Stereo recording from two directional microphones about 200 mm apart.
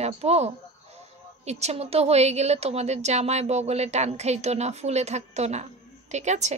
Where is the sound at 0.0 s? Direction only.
30° right (ahead or behind).